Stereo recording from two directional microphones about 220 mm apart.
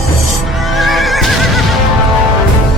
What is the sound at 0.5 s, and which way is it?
Neigh, centre (ahead or behind).